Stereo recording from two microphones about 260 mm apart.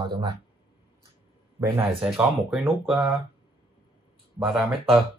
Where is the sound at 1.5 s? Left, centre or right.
Centre.